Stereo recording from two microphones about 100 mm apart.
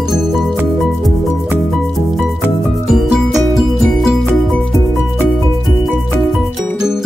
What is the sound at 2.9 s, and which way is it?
Music, centre (ahead or behind).